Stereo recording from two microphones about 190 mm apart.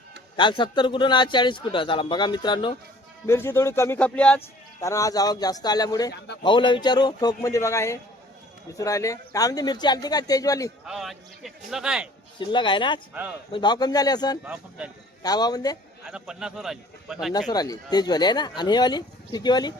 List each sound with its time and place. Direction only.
0.3 s a man's voice: 25° left (ahead or behind)
3.2 s a man's voice: 15° left (ahead or behind)
4.8 s a man's voice: 15° left (ahead or behind)
6.1 s a man's voice: 60° left (ahead or behind)
6.4 s a man's voice: 25° left (ahead or behind)
10.8 s speech: centre (ahead or behind)
12.4 s a man's voice: 25° left (ahead or behind)
14.4 s speech: 5° right (ahead or behind)
15.2 s a man's voice: 20° left (ahead or behind)
16.0 s speech: 5° right (ahead or behind)
17.5 s a man's voice: 20° left (ahead or behind)